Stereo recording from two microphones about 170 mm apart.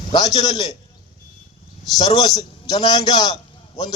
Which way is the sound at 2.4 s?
20° left (ahead or behind).